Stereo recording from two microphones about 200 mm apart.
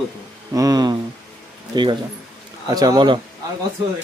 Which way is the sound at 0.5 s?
20° right (ahead or behind).